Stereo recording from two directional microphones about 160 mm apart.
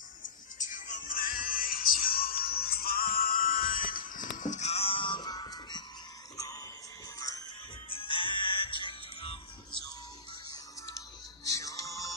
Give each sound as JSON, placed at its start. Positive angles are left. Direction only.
{"t": 0.2, "sound": "music", "side_deg": 55}
{"t": 11.4, "sound": "music", "side_deg": 20}